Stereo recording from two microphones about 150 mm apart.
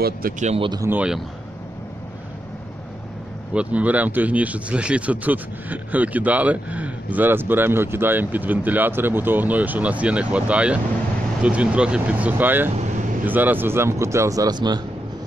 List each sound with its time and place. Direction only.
0.2 s speech: 75° right (ahead or behind)
0.6 s speech: 30° right (ahead or behind)
0.8 s speech: 10° right (ahead or behind)
3.5 s speech: 10° right (ahead or behind)
12.7 s vehicle: 55° right (ahead or behind)
13.2 s speech: 10° right (ahead or behind); by 14.8 s 30° right (ahead or behind)